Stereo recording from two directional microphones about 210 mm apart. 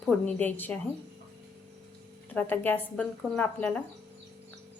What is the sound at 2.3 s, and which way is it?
A woman's voice, 10° left (ahead or behind).